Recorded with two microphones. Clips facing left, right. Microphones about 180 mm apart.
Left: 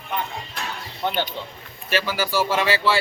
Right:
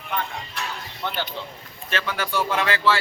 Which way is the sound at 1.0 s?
20° left (ahead or behind).